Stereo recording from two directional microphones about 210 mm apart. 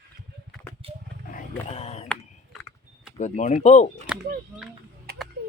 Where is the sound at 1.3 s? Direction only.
35° left (ahead or behind).